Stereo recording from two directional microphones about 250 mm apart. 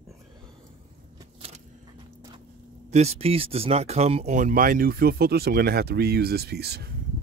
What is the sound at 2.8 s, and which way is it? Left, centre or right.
Speech, right.